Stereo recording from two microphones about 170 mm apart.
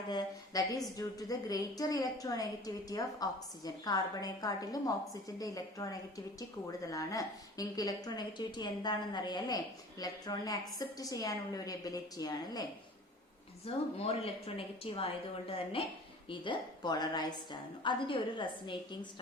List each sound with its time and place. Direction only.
0.1 s a woman's voice: 20° left (ahead or behind)
13.7 s a woman's voice: 35° left (ahead or behind)